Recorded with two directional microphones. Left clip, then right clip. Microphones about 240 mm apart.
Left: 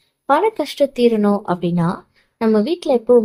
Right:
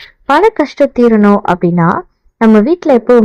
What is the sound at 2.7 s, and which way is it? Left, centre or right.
Speech, right.